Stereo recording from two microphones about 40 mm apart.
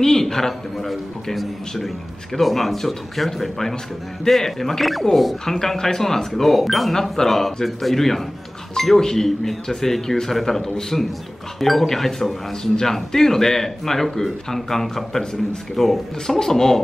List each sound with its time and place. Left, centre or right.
0.0 s a man's voice: centre